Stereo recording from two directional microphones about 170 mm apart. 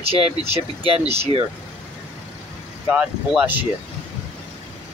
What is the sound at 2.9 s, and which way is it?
Speech, 10° right (ahead or behind).